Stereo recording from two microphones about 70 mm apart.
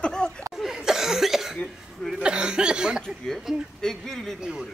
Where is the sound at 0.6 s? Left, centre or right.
Centre.